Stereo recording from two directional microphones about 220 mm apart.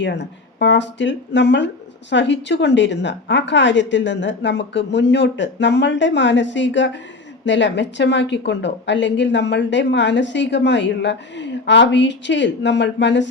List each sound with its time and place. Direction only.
0.0 s speech: 55° left (ahead or behind)